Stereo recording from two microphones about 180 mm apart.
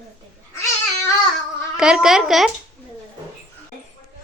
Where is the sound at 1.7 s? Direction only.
5° right (ahead or behind).